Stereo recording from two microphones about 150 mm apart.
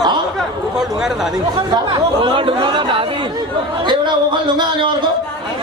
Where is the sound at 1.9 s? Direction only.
35° right (ahead or behind).